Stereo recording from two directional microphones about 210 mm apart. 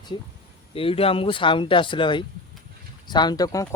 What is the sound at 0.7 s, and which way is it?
Speech, 25° left (ahead or behind).